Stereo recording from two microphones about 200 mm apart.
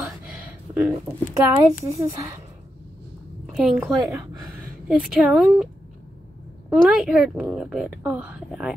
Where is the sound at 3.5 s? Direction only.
Centre (ahead or behind).